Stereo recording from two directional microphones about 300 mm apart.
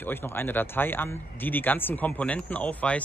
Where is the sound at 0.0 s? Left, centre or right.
Centre.